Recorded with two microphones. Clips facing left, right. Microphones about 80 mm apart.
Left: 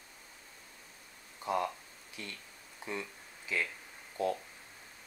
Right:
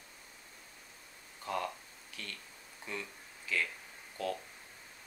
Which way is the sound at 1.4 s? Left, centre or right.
Centre.